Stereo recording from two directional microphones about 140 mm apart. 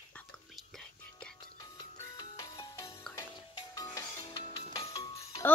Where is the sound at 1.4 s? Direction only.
30° left (ahead or behind).